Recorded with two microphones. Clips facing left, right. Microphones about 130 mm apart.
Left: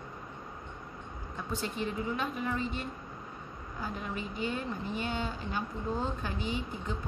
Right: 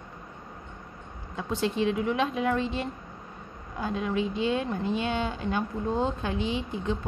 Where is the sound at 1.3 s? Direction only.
90° right.